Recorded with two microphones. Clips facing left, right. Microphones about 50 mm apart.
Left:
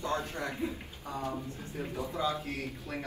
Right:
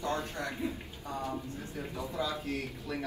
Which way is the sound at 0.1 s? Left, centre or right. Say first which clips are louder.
Left 1 dB; left.